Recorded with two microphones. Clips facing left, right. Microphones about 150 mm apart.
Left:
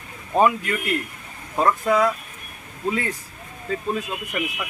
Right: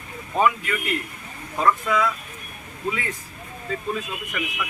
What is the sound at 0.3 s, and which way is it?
Speech, 40° left (ahead or behind).